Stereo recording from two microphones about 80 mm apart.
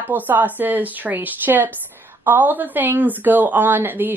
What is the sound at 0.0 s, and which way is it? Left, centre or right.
Speech, right.